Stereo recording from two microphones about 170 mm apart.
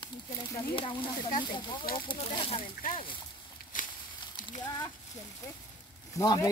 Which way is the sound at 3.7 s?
50° left (ahead or behind).